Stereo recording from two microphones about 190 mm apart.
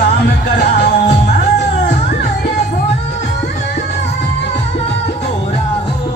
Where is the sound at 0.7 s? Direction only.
65° left (ahead or behind).